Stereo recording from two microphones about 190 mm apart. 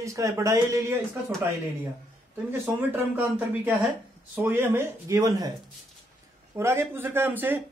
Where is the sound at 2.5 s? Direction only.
10° right (ahead or behind).